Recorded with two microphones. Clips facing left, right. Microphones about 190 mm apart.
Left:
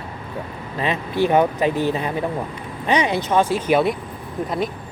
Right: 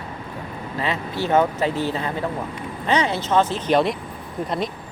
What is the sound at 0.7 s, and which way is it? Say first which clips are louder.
Speech: left 4 dB; 20° left (ahead or behind).